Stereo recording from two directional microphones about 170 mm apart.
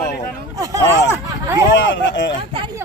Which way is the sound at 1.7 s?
90° left.